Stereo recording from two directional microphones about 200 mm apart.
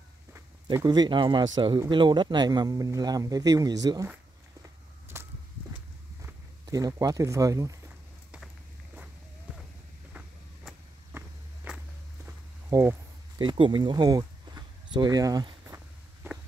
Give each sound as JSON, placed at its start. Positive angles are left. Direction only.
{"t": 0.3, "sound": "speech", "side_deg": -15}
{"t": 5.1, "sound": "walk", "side_deg": -10}
{"t": 6.2, "sound": "speech", "side_deg": -20}
{"t": 11.1, "sound": "walk", "side_deg": -5}
{"t": 13.4, "sound": "a sound", "side_deg": -25}